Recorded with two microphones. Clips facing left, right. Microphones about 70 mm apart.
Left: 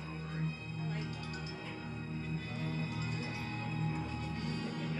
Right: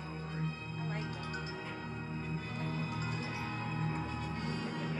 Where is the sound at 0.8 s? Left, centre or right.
Right.